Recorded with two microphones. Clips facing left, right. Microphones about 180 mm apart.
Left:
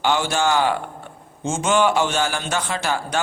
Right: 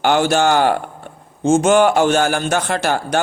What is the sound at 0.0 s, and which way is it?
A man's voice, 60° right (ahead or behind).